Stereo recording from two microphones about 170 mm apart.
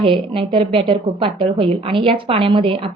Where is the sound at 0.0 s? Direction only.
30° right (ahead or behind).